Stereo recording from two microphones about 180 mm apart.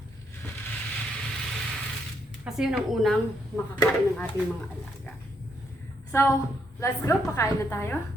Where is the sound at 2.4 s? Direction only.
5° right (ahead or behind).